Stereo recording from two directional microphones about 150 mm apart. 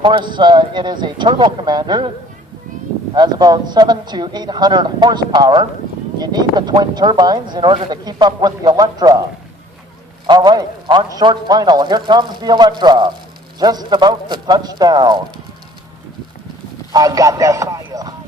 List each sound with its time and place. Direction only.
0.0 s speech: 30° right (ahead or behind)
3.2 s speech: 25° right (ahead or behind)
10.2 s speech: 30° right (ahead or behind)
16.9 s speech: 25° right (ahead or behind)